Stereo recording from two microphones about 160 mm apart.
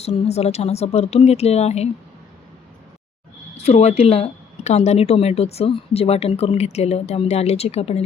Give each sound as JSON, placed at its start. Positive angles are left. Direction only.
{"t": 0.0, "sound": "speech", "side_deg": 40}
{"t": 3.6, "sound": "speech", "side_deg": 40}